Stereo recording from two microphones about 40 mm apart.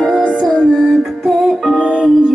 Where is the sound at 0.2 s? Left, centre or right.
Right.